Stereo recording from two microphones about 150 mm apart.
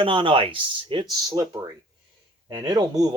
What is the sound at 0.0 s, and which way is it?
Speech, 35° right (ahead or behind).